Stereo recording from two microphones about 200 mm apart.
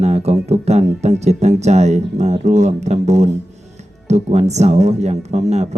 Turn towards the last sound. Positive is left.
turn(degrees=-35)  # may be behind; listen again after turning